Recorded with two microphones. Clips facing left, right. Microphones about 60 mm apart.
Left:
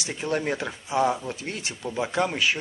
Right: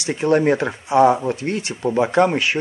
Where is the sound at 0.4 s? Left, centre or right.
Right.